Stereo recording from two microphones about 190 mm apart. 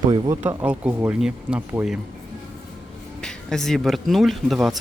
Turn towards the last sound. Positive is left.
turn(degrees=0)  # may be behind; listen again after turning